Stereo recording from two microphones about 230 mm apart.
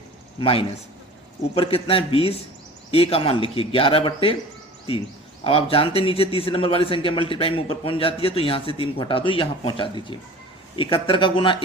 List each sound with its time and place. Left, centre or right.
0.3 s speech: left